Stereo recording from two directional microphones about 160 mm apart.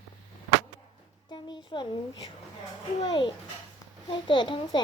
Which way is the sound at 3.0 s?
30° left (ahead or behind).